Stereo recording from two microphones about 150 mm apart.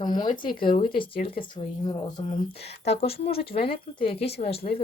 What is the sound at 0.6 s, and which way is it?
Speech, 70° left (ahead or behind).